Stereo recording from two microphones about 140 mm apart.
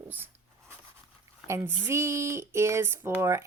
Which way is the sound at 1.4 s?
20° right (ahead or behind).